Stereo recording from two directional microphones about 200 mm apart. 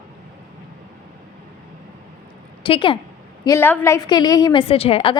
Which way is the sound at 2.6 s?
25° left (ahead or behind).